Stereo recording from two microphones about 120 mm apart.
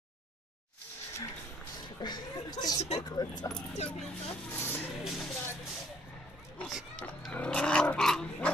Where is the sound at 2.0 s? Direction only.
35° left (ahead or behind).